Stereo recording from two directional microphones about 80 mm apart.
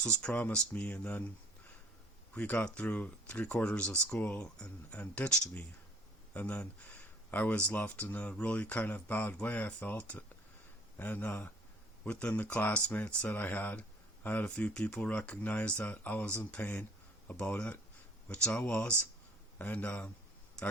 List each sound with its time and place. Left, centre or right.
0.0 s speech: centre
2.3 s speech: centre